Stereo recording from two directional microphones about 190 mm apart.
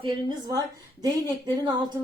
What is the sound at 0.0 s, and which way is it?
A woman's voice, 20° right (ahead or behind).